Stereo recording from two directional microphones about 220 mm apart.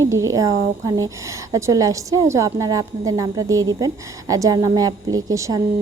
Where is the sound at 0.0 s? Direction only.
15° right (ahead or behind).